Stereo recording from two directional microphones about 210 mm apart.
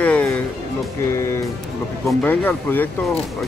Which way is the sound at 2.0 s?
10° left (ahead or behind).